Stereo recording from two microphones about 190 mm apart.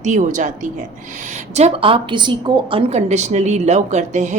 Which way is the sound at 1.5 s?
30° right (ahead or behind).